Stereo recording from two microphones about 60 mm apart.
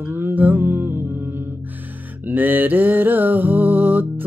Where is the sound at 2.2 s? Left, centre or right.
Right.